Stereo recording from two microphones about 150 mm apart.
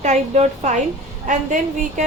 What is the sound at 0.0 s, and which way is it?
Speech, 50° right (ahead or behind).